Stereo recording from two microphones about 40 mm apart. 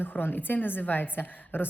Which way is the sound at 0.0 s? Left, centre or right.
Left.